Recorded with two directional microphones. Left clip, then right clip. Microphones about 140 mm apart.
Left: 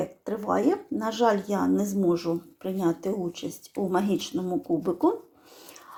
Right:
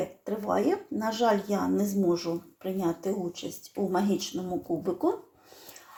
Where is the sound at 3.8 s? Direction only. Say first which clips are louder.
Left 2 dB; 15° left (ahead or behind).